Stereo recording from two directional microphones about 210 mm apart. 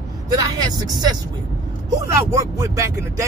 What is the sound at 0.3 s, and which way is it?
Speech, 20° right (ahead or behind).